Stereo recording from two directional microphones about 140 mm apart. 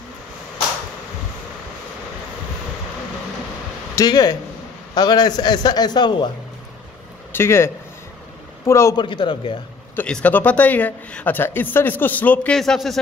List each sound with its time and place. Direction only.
3.9 s a man's voice: 25° left (ahead or behind)
7.3 s a man's voice: 20° left (ahead or behind)
8.9 s a man's voice: 35° left (ahead or behind)
9.9 s speech: 10° left (ahead or behind)